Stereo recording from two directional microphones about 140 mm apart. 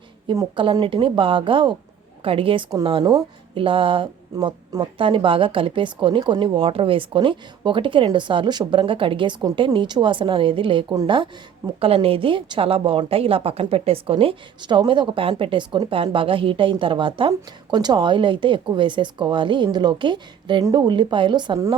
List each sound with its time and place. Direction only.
0.5 s a woman's voice: 35° right (ahead or behind)